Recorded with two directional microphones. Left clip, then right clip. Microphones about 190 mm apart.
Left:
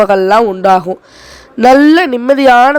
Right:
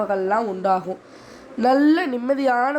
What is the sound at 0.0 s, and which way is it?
Speech, 55° left (ahead or behind).